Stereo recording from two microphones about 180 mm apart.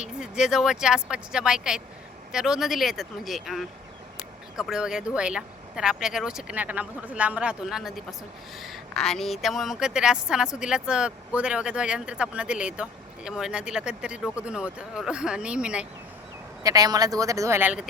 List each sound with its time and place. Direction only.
0.0 s speech: 5° right (ahead or behind)
16.6 s speech: 20° right (ahead or behind)